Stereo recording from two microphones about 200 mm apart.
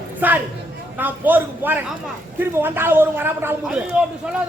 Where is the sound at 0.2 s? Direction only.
10° right (ahead or behind).